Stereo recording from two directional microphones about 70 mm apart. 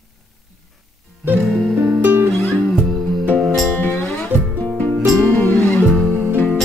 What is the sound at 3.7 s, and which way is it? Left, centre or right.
Music, left.